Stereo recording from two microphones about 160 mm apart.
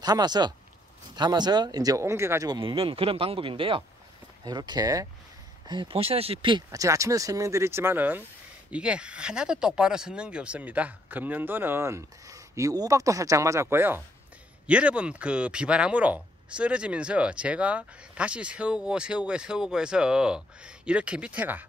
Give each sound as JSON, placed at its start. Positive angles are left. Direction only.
{"t": 0.0, "sound": "speech", "side_deg": -25}